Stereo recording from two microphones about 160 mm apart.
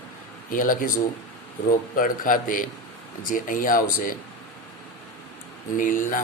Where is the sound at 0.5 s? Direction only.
60° left (ahead or behind).